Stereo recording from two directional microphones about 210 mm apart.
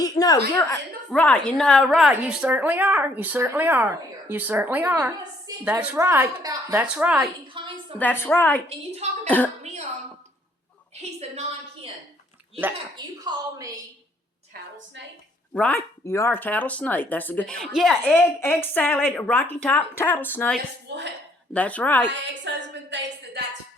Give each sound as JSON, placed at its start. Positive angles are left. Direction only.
{"t": 0.0, "sound": "speech", "side_deg": 15}
{"t": 1.1, "sound": "speech", "side_deg": 5}
{"t": 6.8, "sound": "speech", "side_deg": -5}
{"t": 7.4, "sound": "a sound", "side_deg": -25}
{"t": 7.9, "sound": "speech", "side_deg": 10}
{"t": 11.2, "sound": "a woman's voice", "side_deg": -30}
{"t": 13.2, "sound": "speech", "side_deg": -15}
{"t": 14.5, "sound": "a sound", "side_deg": -45}
{"t": 15.5, "sound": "speech", "side_deg": 10}
{"t": 20.8, "sound": "a woman's voice", "side_deg": -55}
{"t": 21.5, "sound": "speech", "side_deg": 5}
{"t": 22.1, "sound": "a woman's voice", "side_deg": -60}